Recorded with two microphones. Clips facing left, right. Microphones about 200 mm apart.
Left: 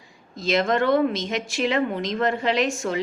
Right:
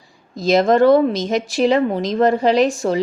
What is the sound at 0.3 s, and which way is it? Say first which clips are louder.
Speech: right 8 dB; 40° right (ahead or behind).